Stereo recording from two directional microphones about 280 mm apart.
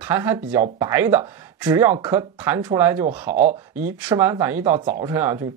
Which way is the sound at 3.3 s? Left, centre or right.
Right.